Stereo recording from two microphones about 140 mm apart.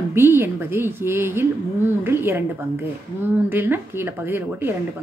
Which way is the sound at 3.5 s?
15° right (ahead or behind).